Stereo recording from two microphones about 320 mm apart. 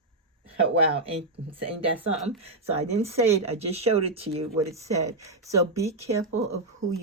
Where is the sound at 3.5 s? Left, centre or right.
Centre.